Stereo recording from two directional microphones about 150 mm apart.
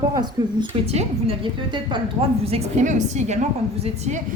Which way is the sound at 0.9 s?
40° right (ahead or behind).